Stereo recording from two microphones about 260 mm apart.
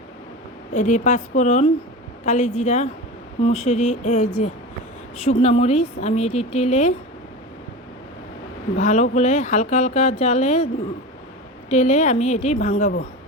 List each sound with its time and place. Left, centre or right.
0.7 s speech: left
8.8 s speech: left
11.7 s speech: left